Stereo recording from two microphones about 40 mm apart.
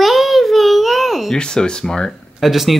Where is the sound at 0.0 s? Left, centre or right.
Centre.